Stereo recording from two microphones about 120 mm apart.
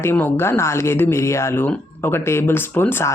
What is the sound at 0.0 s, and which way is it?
Speech, 20° left (ahead or behind).